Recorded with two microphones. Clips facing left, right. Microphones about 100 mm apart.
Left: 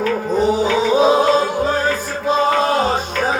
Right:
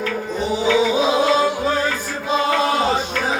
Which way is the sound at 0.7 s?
45° left (ahead or behind).